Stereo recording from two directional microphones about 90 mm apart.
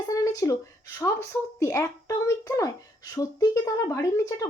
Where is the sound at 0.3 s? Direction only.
40° left (ahead or behind).